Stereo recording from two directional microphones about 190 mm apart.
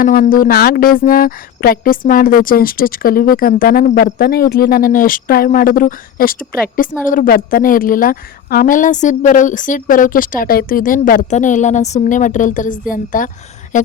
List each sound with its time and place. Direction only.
0.0 s a woman's voice: 50° left (ahead or behind)